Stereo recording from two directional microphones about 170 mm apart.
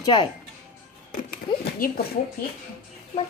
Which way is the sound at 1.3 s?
60° left (ahead or behind).